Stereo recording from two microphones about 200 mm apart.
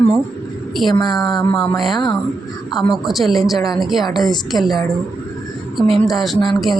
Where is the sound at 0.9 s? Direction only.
20° left (ahead or behind).